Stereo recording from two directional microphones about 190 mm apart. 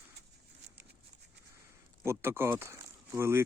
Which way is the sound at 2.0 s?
10° right (ahead or behind).